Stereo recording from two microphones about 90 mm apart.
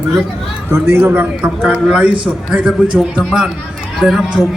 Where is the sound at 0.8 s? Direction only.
25° right (ahead or behind).